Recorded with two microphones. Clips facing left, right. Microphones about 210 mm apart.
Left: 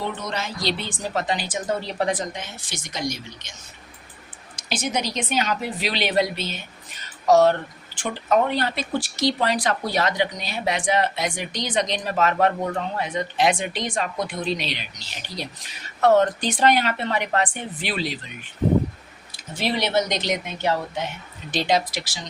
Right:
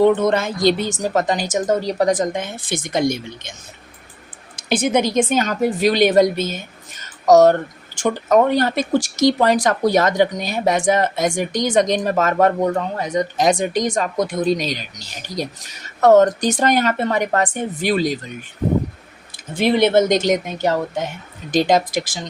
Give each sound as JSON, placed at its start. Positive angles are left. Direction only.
{"t": 0.0, "sound": "a woman's voice", "side_deg": -55}
{"t": 4.5, "sound": "a woman's voice", "side_deg": -55}
{"t": 19.5, "sound": "a woman's voice", "side_deg": -55}